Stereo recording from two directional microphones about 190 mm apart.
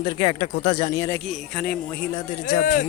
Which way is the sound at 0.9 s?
15° left (ahead or behind).